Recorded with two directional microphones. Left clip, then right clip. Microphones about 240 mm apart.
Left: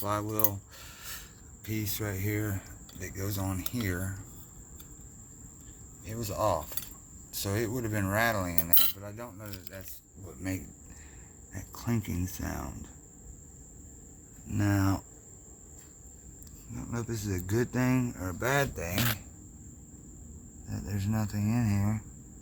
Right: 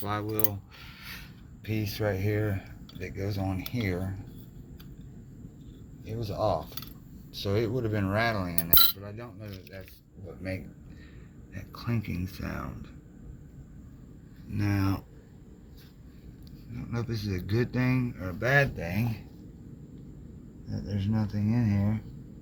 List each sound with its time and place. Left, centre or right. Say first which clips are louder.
0.0 s mechanisms: even; left
1.6 s a man's voice: right 5 dB; left
3.0 s cutlery: right 3 dB; left
6.1 s cutlery: right 1 dB; left
11.5 s a man's voice: left 1 dB; left
14.5 s cutlery: left 1 dB; left
16.9 s a man's voice: right 1 dB; left
20.7 s speech: right 2 dB; centre